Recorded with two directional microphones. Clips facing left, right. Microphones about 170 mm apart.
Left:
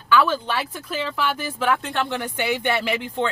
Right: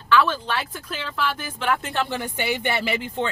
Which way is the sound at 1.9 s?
5° right (ahead or behind).